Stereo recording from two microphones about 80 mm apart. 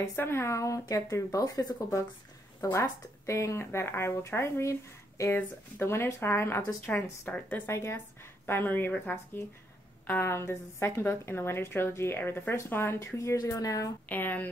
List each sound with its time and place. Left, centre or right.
0.1 s speech: left
7.3 s speech: centre
7.6 s speech: left
14.0 s speech: left